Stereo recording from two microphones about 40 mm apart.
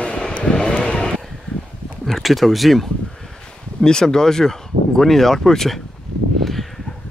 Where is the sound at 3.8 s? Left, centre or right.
Centre.